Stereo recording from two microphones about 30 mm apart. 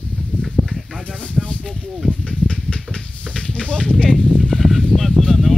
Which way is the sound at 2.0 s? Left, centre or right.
Left.